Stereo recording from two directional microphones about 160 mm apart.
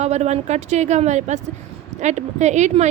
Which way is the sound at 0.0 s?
45° right (ahead or behind).